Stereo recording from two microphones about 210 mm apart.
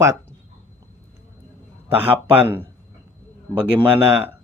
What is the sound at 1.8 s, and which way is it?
Speech, 10° right (ahead or behind).